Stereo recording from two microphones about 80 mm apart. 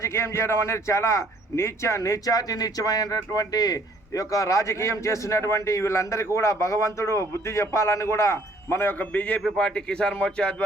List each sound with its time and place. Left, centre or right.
0.0 s a man's voice: left; by 10.5 s centre